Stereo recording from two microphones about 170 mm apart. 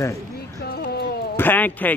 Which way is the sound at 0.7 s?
70° left (ahead or behind).